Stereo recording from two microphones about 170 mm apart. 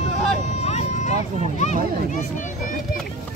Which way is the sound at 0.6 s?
40° left (ahead or behind).